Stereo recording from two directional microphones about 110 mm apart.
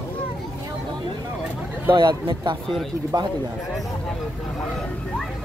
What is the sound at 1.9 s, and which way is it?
A man's voice, 45° right (ahead or behind).